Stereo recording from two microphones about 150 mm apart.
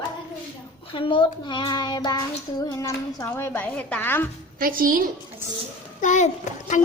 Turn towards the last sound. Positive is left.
turn(degrees=50)  # may be behind; listen again after turning